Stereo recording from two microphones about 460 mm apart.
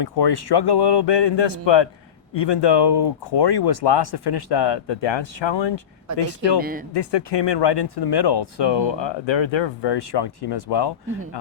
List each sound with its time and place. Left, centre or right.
0.0 s speech: left
6.6 s speech: centre
6.9 s speech: left